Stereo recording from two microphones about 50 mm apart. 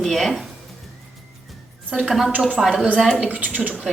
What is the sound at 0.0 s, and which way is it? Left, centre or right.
Speech, centre.